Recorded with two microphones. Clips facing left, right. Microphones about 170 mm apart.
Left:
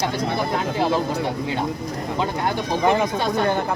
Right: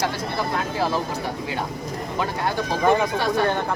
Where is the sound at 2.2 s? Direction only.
20° left (ahead or behind).